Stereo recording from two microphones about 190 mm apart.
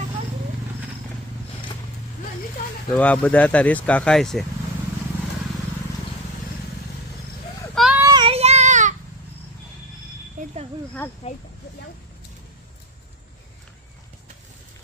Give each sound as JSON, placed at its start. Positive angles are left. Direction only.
{"t": 2.9, "sound": "speech", "side_deg": 5}
{"t": 7.9, "sound": "child singing", "side_deg": -20}
{"t": 10.4, "sound": "a sound", "side_deg": -40}